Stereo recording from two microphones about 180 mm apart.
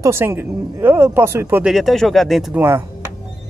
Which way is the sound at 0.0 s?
15° right (ahead or behind).